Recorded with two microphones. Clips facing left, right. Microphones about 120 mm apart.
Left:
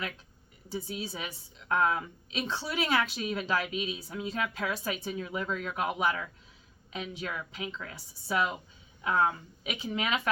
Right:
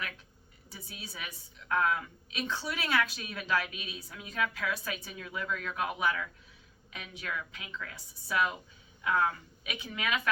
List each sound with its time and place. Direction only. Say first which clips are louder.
0.7 s a woman's voice: left 11 dB; 30° left (ahead or behind)